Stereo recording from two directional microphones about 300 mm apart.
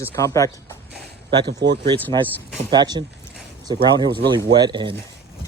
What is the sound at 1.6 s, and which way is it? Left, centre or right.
Speech, right.